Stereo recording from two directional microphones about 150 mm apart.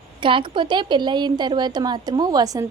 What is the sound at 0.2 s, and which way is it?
A woman's voice, 35° right (ahead or behind).